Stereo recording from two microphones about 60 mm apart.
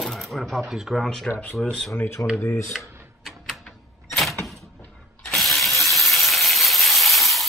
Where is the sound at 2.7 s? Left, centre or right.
Centre.